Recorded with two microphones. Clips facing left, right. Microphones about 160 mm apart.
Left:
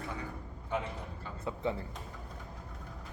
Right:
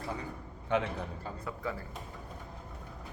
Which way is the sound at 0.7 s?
70° right (ahead or behind).